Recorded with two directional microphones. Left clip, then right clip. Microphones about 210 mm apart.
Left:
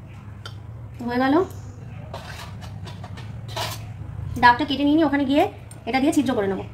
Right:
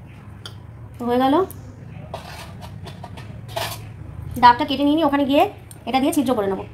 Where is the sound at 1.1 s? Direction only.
15° right (ahead or behind).